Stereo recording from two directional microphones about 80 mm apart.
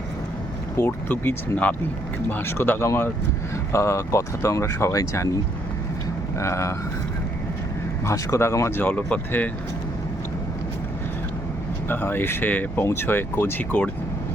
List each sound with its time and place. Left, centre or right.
0.8 s speech: left
6.4 s speech: left
8.0 s speech: left
8.8 s speech: left
11.9 s speech: left